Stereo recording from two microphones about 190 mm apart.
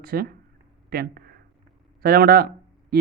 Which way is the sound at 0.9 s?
55° right (ahead or behind).